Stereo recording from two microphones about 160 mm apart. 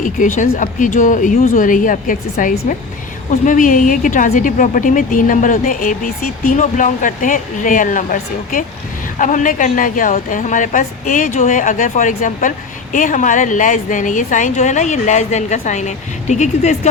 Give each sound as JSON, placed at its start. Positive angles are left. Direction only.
{"t": 0.0, "sound": "a woman's voice", "side_deg": 55}